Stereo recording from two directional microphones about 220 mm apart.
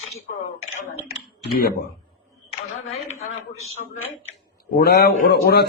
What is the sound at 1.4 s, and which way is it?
Speech, 45° left (ahead or behind).